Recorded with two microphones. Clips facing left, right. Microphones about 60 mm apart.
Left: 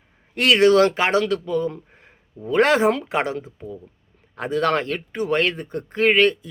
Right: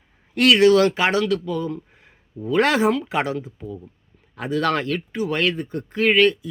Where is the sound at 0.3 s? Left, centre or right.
Left.